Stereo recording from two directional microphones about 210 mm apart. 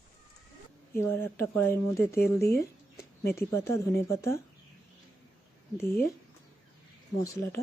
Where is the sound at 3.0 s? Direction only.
15° left (ahead or behind).